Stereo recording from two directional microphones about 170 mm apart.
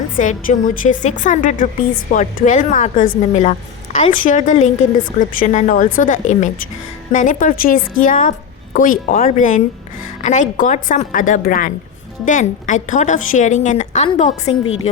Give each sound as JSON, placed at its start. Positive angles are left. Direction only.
{"t": 0.2, "sound": "a woman's voice", "side_deg": 50}